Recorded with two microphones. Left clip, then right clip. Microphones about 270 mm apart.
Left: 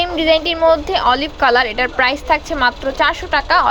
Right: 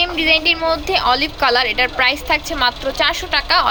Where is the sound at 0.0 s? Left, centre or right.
Centre.